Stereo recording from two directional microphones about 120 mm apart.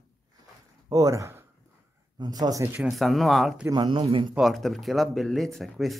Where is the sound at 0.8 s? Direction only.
30° right (ahead or behind).